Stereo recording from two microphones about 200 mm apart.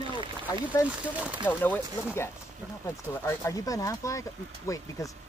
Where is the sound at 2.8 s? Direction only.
15° left (ahead or behind).